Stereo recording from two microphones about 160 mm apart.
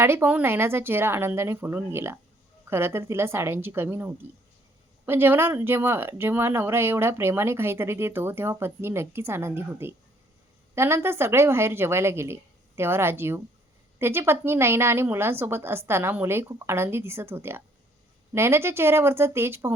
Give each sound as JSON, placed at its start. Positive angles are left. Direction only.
{"t": 0.0, "sound": "speech", "side_deg": -15}